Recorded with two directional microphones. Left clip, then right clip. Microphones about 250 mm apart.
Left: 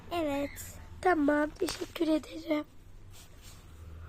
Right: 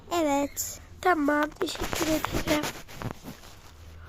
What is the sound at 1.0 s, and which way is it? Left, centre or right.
Speech, centre.